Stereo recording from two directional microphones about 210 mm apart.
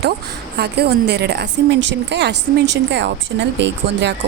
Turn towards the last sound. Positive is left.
turn(degrees=-55)  # may be behind; listen again after turning